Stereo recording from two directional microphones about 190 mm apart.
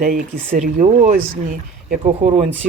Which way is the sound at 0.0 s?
45° right (ahead or behind).